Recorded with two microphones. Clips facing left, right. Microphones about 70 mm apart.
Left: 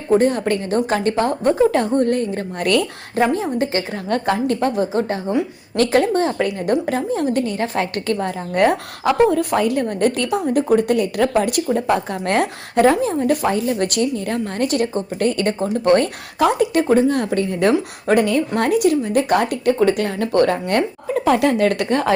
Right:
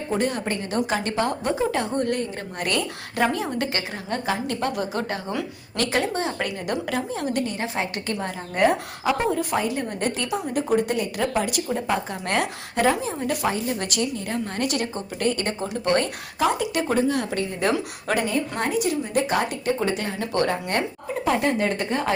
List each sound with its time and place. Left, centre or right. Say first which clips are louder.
0.1 s a woman's voice: left 10 dB; left
3.3 s a woman's voice: left 6 dB; left
3.9 s a woman's voice: left 7 dB; left
4.6 s a woman's voice: left 7 dB; left
5.7 s a woman's voice: left 8 dB; left
16.4 s a woman's voice: left 7 dB; left
16.9 s a woman's voice: left 7 dB; left
18.5 s a woman's voice: left 8 dB; left
21.2 s a woman's voice: left 6 dB; left